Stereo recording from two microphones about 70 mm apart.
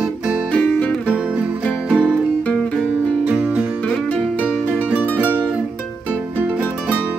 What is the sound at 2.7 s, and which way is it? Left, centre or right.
Music, centre.